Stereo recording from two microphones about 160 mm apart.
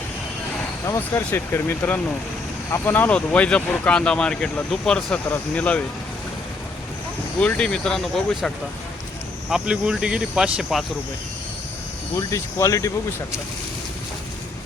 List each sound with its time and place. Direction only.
0.9 s speech: 15° left (ahead or behind)
7.3 s speech: 5° left (ahead or behind)
12.1 s speech: 20° left (ahead or behind)